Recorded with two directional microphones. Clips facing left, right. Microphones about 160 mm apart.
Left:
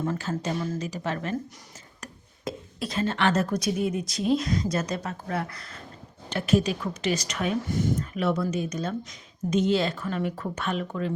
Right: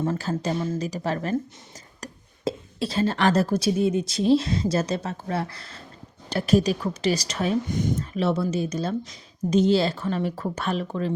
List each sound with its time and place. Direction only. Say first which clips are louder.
0.0 s a woman's voice: right 3 dB; 30° right (ahead or behind)
7.7 s speech: right 1 dB; 20° right (ahead or behind)
8.1 s a woman's voice: right 4 dB; 30° right (ahead or behind)